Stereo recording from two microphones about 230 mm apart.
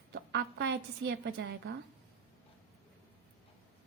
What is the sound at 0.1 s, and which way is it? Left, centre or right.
A woman's voice, right.